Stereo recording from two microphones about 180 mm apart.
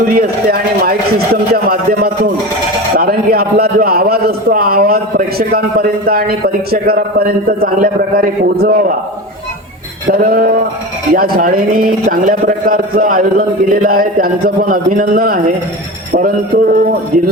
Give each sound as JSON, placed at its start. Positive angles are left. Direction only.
{"t": 0.1, "sound": "a man's voice", "side_deg": -55}
{"t": 10.1, "sound": "a man's voice", "side_deg": -55}